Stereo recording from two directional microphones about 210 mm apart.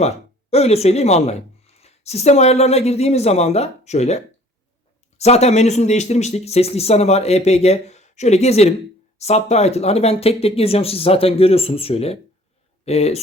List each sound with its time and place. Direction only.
0.5 s a woman's voice: 30° left (ahead or behind)